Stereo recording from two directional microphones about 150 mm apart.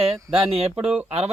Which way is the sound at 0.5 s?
40° right (ahead or behind).